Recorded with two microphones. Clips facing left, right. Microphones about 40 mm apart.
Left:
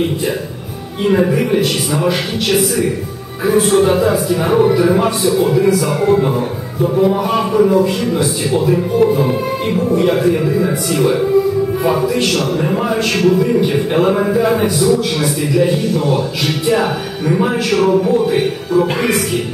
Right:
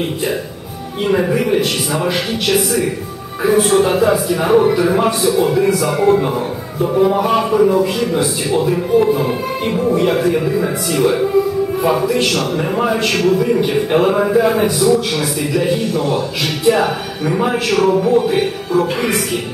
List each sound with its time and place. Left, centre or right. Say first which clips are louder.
1.0 s a man's voice: left 2 dB; centre